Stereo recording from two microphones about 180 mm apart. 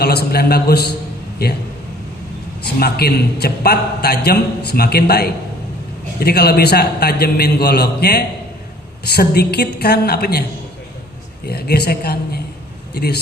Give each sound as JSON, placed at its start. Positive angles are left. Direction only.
{"t": 0.0, "sound": "a man's voice", "side_deg": 60}
{"t": 2.6, "sound": "a man's voice", "side_deg": 60}
{"t": 11.4, "sound": "a man's voice", "side_deg": 60}